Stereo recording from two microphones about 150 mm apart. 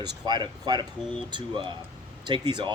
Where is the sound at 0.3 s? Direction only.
30° right (ahead or behind).